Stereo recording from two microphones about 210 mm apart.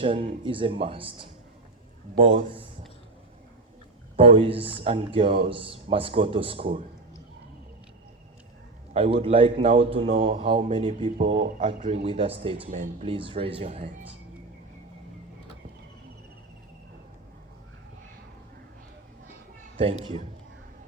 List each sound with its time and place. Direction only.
0.0 s speech: 25° right (ahead or behind)
4.2 s speech: 25° right (ahead or behind)
8.9 s speech: 25° right (ahead or behind)
19.7 s a man's voice: 30° right (ahead or behind)